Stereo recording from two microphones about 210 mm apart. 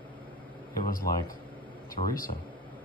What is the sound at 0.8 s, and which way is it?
Speech, 40° left (ahead or behind).